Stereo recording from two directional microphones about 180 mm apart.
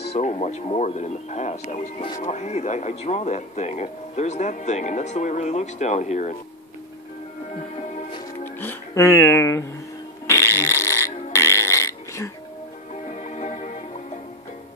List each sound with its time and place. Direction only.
0.1 s speech: 35° left (ahead or behind)
8.5 s speech: 15° left (ahead or behind)
10.2 s burping: 15° left (ahead or behind)
13.1 s music: 40° left (ahead or behind)